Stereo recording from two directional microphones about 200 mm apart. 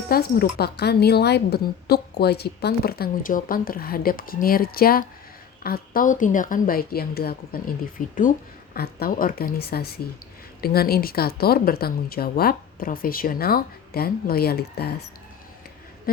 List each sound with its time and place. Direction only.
0.1 s a woman's voice: 50° left (ahead or behind)